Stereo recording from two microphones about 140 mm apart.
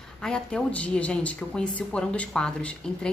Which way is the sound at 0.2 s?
5° left (ahead or behind).